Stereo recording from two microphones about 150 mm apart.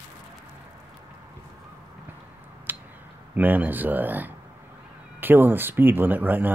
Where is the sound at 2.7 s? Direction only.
10° right (ahead or behind).